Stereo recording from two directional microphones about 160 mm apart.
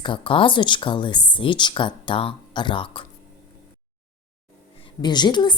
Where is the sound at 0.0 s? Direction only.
30° left (ahead or behind).